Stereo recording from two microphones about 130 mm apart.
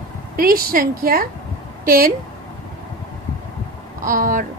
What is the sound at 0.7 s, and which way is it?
Speech, 90° right.